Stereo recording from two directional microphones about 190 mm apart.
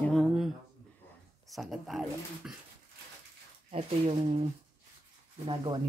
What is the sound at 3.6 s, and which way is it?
Speech, 35° right (ahead or behind).